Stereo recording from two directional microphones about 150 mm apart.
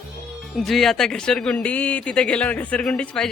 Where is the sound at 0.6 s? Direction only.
Centre (ahead or behind).